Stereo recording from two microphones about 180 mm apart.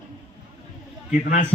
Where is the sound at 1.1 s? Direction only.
45° left (ahead or behind).